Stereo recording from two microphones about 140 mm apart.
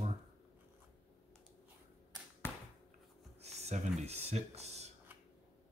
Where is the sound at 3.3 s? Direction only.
50° right (ahead or behind).